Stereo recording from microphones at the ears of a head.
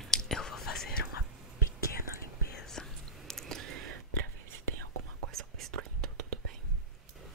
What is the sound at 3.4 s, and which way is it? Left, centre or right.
Whispering, right.